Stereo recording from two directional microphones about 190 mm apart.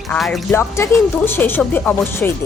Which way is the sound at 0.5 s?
10° left (ahead or behind).